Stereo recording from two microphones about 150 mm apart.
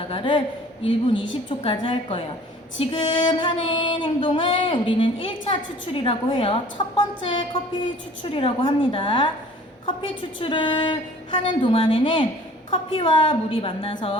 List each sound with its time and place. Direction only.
0.1 s music: 35° left (ahead or behind)